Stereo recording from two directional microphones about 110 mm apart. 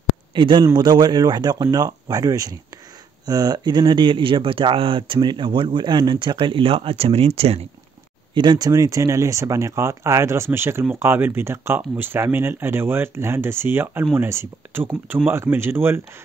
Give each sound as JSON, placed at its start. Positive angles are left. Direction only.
{"t": 0.3, "sound": "speech", "side_deg": -45}
{"t": 8.4, "sound": "speech", "side_deg": -40}